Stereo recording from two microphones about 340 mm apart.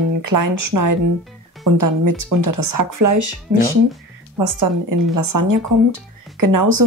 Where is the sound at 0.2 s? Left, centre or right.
Right.